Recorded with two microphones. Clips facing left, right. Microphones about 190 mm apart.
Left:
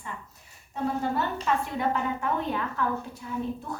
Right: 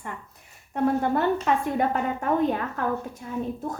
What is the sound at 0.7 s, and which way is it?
A woman's voice, 60° right (ahead or behind).